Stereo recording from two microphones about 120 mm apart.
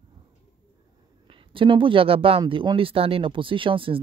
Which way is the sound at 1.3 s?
45° right (ahead or behind).